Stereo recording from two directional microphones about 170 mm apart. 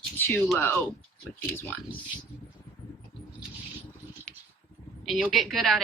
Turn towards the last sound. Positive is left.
turn(degrees=0)  # may be behind; listen again after turning